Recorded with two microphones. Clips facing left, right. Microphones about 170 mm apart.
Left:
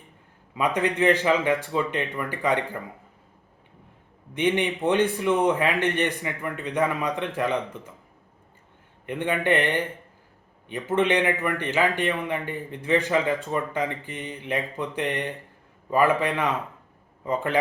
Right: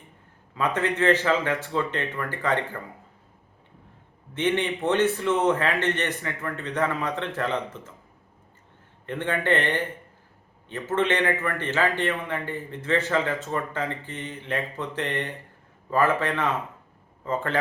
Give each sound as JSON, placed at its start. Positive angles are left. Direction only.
{"t": 0.5, "sound": "a man's voice", "side_deg": 15}
{"t": 4.4, "sound": "a man's voice", "side_deg": 15}
{"t": 9.0, "sound": "a man's voice", "side_deg": 15}